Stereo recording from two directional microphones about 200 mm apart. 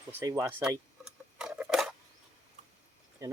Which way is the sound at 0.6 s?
5° right (ahead or behind).